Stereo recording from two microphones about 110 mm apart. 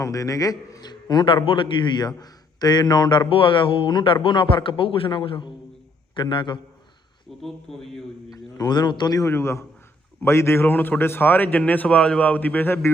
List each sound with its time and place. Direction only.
0.0 s a man's voice: 30° left (ahead or behind)
7.4 s speech: 5° left (ahead or behind)
8.3 s a man's voice: 35° left (ahead or behind)
9.3 s a man's voice: 25° left (ahead or behind)